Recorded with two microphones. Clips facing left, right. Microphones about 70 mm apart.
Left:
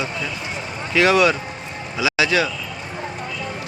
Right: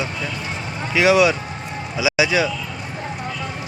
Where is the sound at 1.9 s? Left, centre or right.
Centre.